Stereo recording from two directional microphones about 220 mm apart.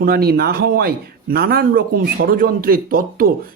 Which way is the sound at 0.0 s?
45° right (ahead or behind).